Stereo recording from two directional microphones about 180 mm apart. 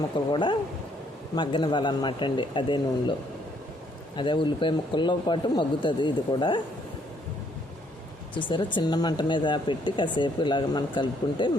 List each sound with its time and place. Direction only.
0.3 s speech: 25° left (ahead or behind)
8.4 s speech: 25° left (ahead or behind)